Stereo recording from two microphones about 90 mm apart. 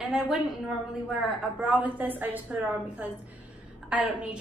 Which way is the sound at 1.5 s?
15° right (ahead or behind).